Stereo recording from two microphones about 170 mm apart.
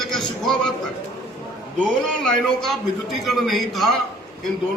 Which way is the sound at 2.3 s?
Centre (ahead or behind).